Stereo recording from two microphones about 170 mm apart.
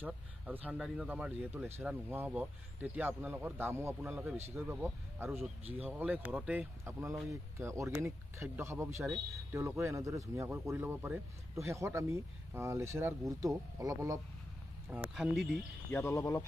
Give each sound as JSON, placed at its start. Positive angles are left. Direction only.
{"t": 0.0, "sound": "speech", "side_deg": -10}
{"t": 14.9, "sound": "speech", "side_deg": -5}
{"t": 15.9, "sound": "speech", "side_deg": 15}